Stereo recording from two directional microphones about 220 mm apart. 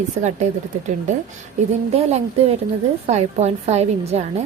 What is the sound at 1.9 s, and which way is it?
A woman's voice, 30° right (ahead or behind).